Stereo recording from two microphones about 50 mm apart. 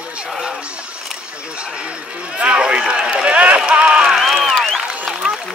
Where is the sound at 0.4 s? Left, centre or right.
Centre.